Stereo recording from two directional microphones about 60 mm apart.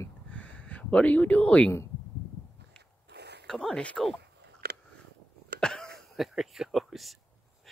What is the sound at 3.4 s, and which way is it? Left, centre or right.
Speech, centre.